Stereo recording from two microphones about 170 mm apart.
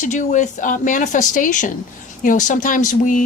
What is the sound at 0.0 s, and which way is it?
Speech, 45° left (ahead or behind).